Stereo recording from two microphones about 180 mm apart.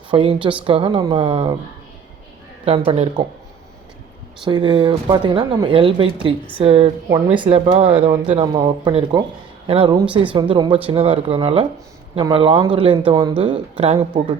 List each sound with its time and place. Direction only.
0.1 s speech: 30° right (ahead or behind)
2.6 s speech: 35° right (ahead or behind)
4.4 s speech: 25° right (ahead or behind)